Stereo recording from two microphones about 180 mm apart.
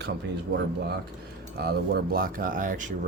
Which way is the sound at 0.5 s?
65° right (ahead or behind).